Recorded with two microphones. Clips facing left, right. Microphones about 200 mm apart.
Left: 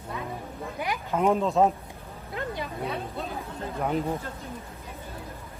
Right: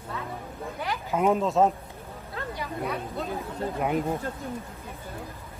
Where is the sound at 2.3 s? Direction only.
20° left (ahead or behind).